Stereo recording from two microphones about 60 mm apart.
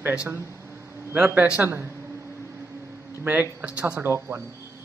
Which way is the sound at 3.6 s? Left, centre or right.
Right.